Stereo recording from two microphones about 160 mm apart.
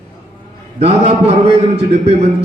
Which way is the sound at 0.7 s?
40° right (ahead or behind).